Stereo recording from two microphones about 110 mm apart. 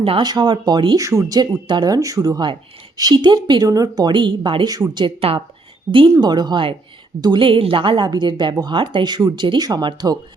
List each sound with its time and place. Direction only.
0.2 s a woman's voice: 40° right (ahead or behind)
0.9 s speech: 30° right (ahead or behind)
1.4 s a woman's voice: 40° right (ahead or behind)
4.1 s a woman's voice: 50° right (ahead or behind)
4.7 s speech: 35° right (ahead or behind)
5.0 s speech: 60° right (ahead or behind)
5.9 s a woman's voice: 45° right (ahead or behind)